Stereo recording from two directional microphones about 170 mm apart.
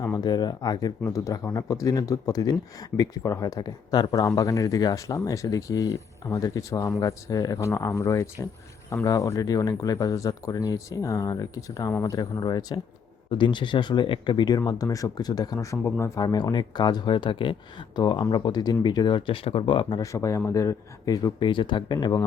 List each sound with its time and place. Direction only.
0.0 s speech: 20° left (ahead or behind)